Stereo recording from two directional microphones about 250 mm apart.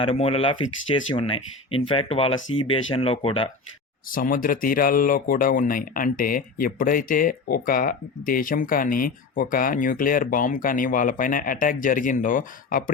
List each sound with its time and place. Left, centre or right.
0.0 s speech: left
4.1 s speech: left